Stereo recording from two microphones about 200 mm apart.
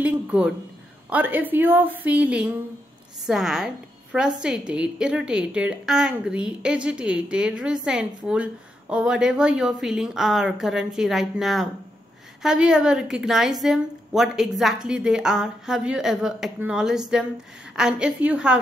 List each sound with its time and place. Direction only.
0.0 s a woman's voice: 5° right (ahead or behind)